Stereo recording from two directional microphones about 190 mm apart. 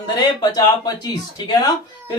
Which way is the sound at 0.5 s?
20° left (ahead or behind).